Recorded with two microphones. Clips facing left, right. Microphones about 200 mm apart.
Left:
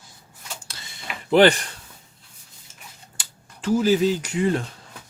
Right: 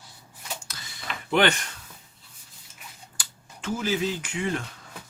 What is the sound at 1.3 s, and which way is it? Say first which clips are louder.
Speech: left 7 dB; 35° left (ahead or behind).